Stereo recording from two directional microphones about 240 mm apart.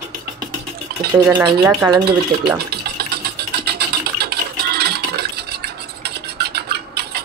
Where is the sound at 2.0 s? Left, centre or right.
Right.